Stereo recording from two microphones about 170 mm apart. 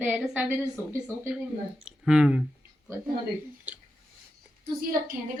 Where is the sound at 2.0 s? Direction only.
5° right (ahead or behind).